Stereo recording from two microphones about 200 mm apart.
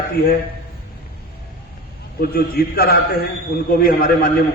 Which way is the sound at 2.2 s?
50° left (ahead or behind).